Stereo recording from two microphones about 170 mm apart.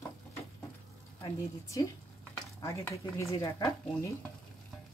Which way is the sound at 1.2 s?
20° left (ahead or behind).